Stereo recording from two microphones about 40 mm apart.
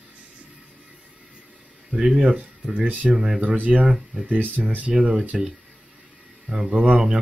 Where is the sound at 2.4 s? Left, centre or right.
Right.